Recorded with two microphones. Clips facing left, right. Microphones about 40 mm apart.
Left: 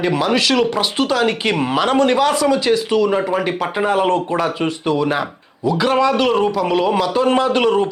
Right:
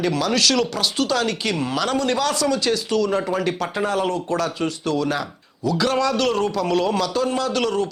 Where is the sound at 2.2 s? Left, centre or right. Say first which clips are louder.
Left 6 dB; left.